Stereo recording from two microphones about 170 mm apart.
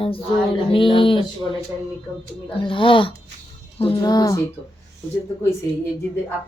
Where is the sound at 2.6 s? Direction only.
30° left (ahead or behind).